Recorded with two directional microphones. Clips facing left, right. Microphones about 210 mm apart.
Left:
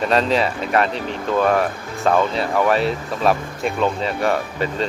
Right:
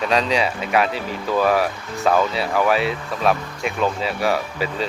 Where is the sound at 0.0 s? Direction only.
Centre (ahead or behind).